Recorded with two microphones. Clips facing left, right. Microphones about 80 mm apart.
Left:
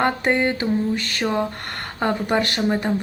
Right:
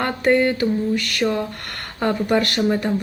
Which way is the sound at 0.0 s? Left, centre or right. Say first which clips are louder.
Right 2 dB; left.